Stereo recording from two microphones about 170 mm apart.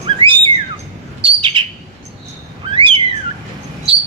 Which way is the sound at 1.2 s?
30° right (ahead or behind).